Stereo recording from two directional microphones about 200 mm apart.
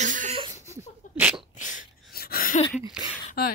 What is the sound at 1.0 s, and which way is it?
Sneeze, 40° left (ahead or behind).